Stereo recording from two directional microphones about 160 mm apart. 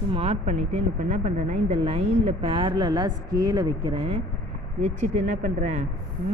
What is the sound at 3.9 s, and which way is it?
Speech, 40° right (ahead or behind).